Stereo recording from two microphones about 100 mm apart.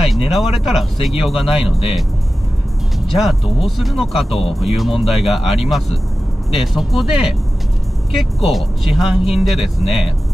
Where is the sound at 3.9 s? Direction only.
75° left (ahead or behind).